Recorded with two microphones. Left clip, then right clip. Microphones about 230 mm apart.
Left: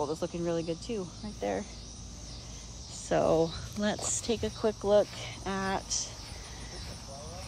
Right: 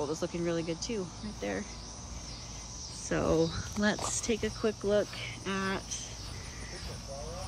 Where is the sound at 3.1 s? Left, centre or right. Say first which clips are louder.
Left 3 dB; right.